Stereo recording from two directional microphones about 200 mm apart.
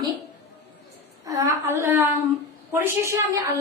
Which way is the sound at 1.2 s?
15° right (ahead or behind).